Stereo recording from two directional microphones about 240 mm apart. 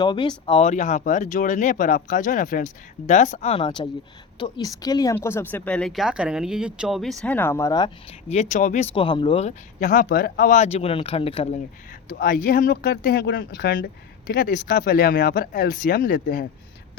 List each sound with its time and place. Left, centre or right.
0.0 s speech: centre
8.3 s speech: left
9.0 s speech: left
12.1 s speech: left